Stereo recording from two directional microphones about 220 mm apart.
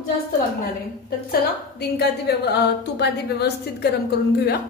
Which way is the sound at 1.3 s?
45° left (ahead or behind).